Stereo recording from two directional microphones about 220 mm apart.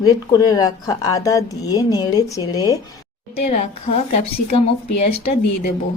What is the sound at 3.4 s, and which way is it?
Speech, 30° left (ahead or behind).